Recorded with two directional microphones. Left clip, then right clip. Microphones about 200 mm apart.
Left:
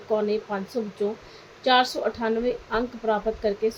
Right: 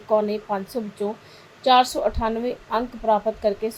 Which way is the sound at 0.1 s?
20° right (ahead or behind).